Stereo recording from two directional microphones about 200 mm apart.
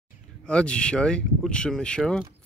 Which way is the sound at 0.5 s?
5° left (ahead or behind).